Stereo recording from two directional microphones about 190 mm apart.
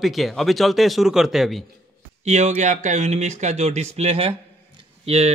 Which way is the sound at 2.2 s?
35° right (ahead or behind).